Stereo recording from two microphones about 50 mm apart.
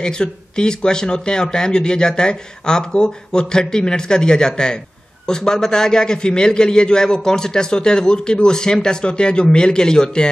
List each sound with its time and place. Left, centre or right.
0.0 s a man's voice: centre